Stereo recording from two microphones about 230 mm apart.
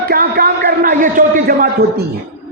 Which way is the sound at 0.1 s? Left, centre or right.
Right.